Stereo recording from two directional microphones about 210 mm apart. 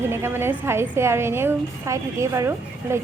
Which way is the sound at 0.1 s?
10° right (ahead or behind).